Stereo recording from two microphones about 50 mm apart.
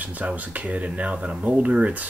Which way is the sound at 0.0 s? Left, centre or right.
Right.